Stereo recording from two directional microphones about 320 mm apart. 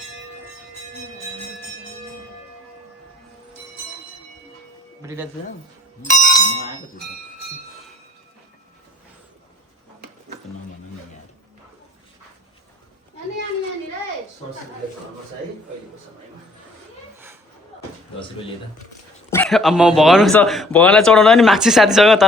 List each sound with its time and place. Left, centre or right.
5.0 s speech: centre
6.0 s speech: left
19.3 s speech: centre